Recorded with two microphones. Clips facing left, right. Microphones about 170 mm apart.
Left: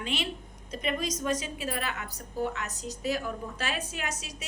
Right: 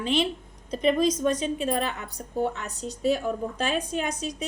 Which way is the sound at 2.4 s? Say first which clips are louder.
Right 4 dB; 35° right (ahead or behind).